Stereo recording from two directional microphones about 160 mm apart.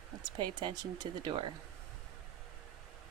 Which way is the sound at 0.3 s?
30° right (ahead or behind).